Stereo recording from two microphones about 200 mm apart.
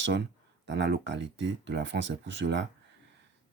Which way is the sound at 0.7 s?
60° right (ahead or behind).